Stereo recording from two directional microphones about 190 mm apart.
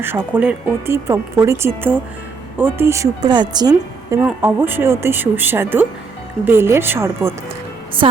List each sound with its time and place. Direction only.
0.0 s speech: 10° right (ahead or behind)